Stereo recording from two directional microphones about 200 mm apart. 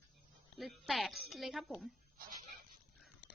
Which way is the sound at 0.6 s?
Centre (ahead or behind).